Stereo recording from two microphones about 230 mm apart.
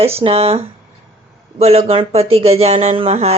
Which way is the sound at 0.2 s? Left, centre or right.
Right.